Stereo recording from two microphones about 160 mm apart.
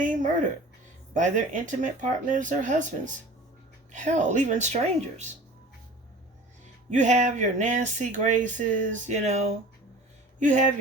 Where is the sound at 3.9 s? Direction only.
50° right (ahead or behind).